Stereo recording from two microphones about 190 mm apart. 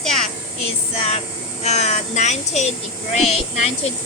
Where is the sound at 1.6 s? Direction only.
35° left (ahead or behind).